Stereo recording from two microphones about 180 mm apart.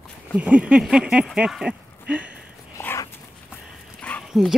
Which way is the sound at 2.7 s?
15° left (ahead or behind).